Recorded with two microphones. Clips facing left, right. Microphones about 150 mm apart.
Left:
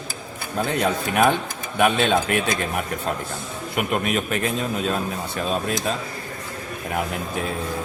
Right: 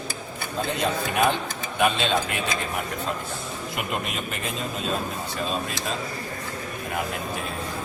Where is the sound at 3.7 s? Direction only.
60° left (ahead or behind).